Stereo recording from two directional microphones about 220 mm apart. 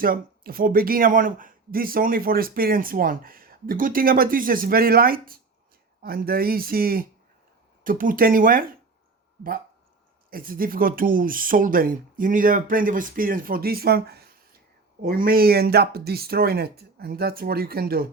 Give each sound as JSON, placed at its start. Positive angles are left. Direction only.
{"t": 0.0, "sound": "speech", "side_deg": -40}
{"t": 10.2, "sound": "speech", "side_deg": -40}